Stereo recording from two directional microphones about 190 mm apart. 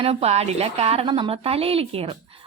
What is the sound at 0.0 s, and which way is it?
A woman's voice, 35° right (ahead or behind).